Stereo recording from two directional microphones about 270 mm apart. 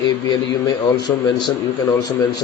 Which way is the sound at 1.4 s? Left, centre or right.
Centre.